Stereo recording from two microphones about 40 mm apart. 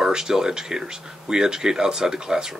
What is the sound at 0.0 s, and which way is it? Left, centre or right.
Speech, centre.